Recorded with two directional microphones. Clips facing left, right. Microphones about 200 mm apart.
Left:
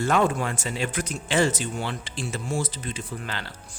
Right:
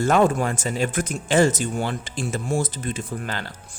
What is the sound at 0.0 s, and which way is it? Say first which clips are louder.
Speech: right 4 dB; 45° right (ahead or behind).